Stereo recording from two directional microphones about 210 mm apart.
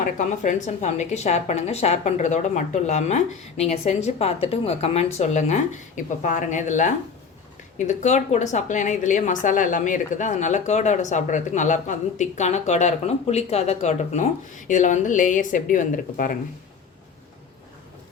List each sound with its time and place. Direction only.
0.0 s a woman's voice: 35° left (ahead or behind)